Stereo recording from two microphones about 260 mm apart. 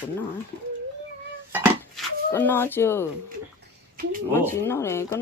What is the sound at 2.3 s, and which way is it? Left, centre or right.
Speech, centre.